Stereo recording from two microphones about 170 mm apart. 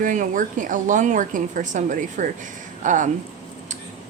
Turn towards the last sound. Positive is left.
turn(degrees=-50)  # may be behind; listen again after turning